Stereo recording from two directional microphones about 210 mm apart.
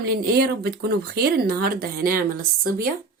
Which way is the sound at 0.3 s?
50° right (ahead or behind).